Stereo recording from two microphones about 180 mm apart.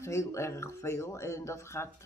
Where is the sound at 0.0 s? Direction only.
15° left (ahead or behind).